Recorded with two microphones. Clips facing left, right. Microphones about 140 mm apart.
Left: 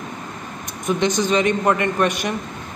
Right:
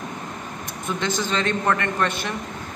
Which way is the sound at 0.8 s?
15° left (ahead or behind).